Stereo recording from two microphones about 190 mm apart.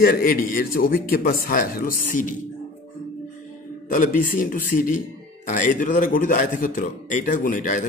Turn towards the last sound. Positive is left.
turn(degrees=45)  # may be behind; listen again after turning